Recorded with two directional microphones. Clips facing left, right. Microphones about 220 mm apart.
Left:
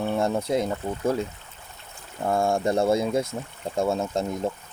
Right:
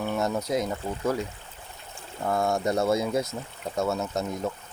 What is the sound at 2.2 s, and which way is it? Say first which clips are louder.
Speech: left 2 dB; 25° left (ahead or behind).